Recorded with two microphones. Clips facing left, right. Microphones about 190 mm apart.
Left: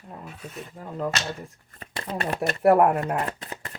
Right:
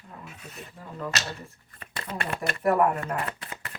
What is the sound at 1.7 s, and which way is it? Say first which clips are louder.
Shuffling cards: left 4 dB; 40° left (ahead or behind).